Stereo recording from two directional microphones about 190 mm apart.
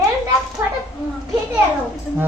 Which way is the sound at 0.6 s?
15° right (ahead or behind).